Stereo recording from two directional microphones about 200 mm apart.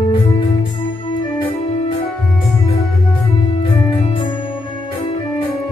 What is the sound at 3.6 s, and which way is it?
Music, 30° left (ahead or behind).